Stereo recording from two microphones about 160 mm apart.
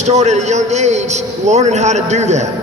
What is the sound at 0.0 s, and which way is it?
A man's voice, 45° right (ahead or behind).